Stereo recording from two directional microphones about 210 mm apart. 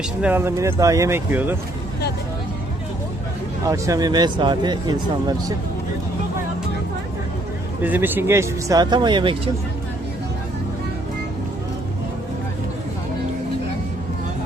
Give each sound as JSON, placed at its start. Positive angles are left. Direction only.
{"t": 0.2, "sound": "speech", "side_deg": -10}
{"t": 3.6, "sound": "speech", "side_deg": -15}
{"t": 7.8, "sound": "speech", "side_deg": -10}